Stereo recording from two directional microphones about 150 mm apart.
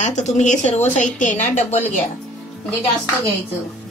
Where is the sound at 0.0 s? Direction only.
55° left (ahead or behind).